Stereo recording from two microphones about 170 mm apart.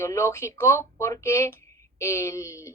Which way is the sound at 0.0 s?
15° left (ahead or behind).